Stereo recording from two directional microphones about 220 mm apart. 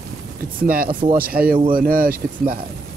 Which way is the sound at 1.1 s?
40° right (ahead or behind).